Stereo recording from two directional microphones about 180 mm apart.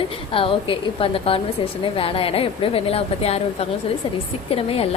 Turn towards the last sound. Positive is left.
turn(degrees=35)  # may be behind; listen again after turning